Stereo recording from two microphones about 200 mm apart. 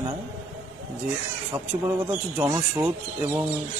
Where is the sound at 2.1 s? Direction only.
10° right (ahead or behind).